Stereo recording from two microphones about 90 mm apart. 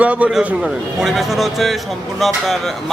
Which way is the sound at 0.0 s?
15° right (ahead or behind).